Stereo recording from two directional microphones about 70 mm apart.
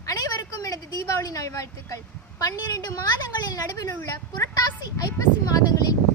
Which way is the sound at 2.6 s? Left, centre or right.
Left.